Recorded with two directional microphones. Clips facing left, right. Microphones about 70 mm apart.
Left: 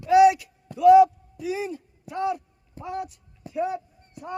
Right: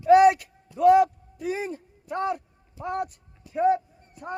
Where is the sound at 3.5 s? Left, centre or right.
Right.